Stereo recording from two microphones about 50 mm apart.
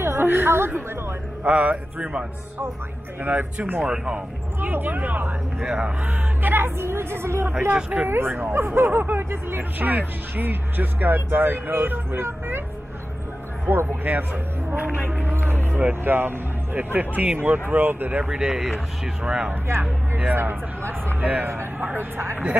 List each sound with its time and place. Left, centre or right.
0.0 s a sound: right
1.4 s speech: right
3.8 s speech: centre
4.6 s speech: right
5.6 s speech: centre
6.0 s a woman's voice: right
7.5 s speech: right
8.1 s speech: right
13.7 s speech: right
16.7 s speech: right
18.3 s speech: centre
20.3 s speech: right
21.2 s speech: right
21.5 s speech: right